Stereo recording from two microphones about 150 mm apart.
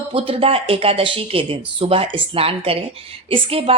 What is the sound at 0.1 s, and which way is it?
Speech, 40° right (ahead or behind).